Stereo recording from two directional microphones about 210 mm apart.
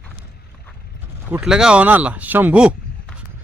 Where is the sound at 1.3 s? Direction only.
5° right (ahead or behind).